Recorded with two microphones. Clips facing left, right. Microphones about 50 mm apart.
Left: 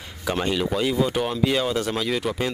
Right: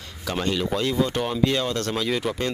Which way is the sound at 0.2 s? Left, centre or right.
Centre.